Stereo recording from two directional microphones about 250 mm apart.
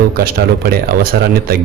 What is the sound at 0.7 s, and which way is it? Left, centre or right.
Speech, right.